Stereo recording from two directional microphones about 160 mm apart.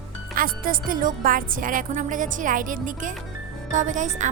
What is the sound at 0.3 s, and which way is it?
Speech, 60° right (ahead or behind).